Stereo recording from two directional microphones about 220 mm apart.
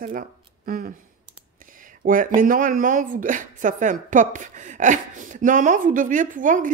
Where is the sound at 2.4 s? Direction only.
35° right (ahead or behind).